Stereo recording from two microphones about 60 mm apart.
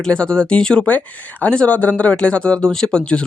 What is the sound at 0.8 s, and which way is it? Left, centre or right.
Speech, left.